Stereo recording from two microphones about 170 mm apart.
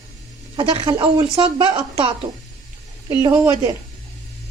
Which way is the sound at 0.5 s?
30° right (ahead or behind).